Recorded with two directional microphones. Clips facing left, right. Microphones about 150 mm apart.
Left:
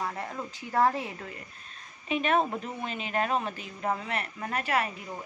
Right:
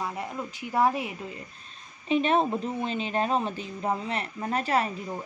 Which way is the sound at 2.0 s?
30° right (ahead or behind).